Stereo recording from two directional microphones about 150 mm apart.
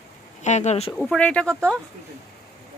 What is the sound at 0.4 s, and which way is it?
Speech, 50° left (ahead or behind).